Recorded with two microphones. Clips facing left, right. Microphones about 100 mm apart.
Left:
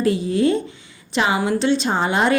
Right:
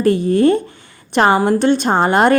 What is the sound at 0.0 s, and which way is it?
A woman's voice, 55° right (ahead or behind).